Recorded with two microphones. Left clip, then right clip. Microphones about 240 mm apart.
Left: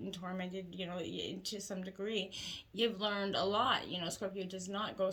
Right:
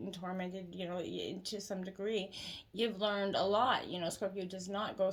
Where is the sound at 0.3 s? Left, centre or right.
Left.